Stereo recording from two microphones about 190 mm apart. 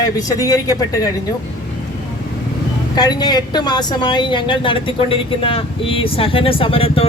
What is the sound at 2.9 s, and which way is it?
Speech, 20° left (ahead or behind).